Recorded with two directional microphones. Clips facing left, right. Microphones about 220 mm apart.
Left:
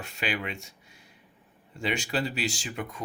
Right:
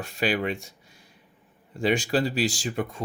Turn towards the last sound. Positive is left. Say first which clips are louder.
# right 6 dB
turn(degrees=-30)  # may be behind; listen again after turning